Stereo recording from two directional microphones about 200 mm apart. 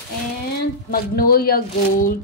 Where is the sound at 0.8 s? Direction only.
50° left (ahead or behind).